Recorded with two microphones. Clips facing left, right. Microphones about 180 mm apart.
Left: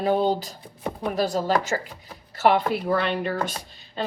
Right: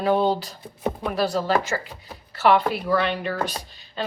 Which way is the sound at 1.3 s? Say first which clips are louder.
Even; 45° left (ahead or behind).